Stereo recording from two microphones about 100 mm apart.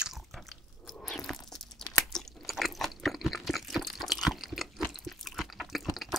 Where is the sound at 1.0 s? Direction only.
5° left (ahead or behind).